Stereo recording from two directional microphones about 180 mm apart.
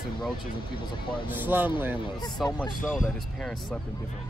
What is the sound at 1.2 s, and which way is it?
Speech, 10° right (ahead or behind).